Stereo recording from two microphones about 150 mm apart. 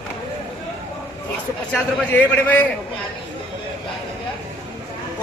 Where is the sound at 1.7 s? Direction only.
10° left (ahead or behind).